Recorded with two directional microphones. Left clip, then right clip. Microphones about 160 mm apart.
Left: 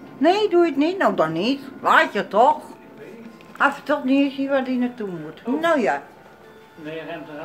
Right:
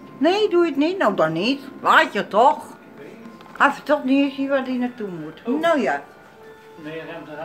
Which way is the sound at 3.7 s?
10° right (ahead or behind).